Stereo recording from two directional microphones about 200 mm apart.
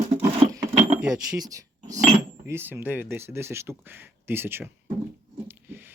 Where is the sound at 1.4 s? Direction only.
15° right (ahead or behind).